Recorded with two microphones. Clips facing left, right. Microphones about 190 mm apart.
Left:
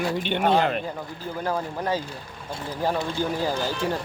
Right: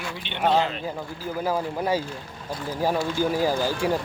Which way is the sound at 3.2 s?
10° right (ahead or behind).